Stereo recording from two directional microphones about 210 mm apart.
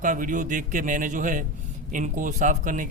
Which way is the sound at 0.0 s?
40° right (ahead or behind).